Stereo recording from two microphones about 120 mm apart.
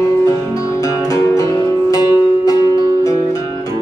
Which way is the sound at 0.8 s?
25° left (ahead or behind).